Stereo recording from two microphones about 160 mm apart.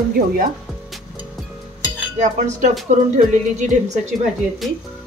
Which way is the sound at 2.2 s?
50° right (ahead or behind).